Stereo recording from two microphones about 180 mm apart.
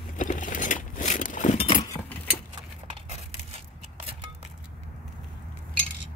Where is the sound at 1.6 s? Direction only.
25° left (ahead or behind).